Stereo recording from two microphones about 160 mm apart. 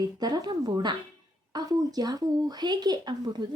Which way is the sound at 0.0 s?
25° right (ahead or behind).